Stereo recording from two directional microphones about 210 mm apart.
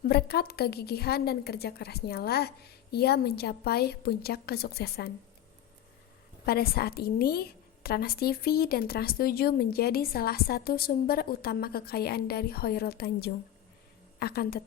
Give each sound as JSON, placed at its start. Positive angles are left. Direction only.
{"t": 0.0, "sound": "a woman's voice", "side_deg": 50}
{"t": 6.4, "sound": "a woman's voice", "side_deg": 45}